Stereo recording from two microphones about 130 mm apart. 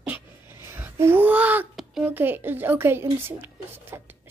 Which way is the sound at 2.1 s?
15° right (ahead or behind).